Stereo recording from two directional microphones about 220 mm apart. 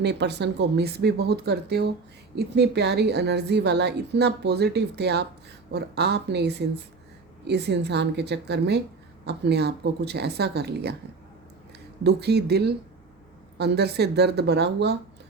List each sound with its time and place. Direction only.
0.0 s a woman's voice: 50° right (ahead or behind)
12.0 s a woman's voice: 50° right (ahead or behind)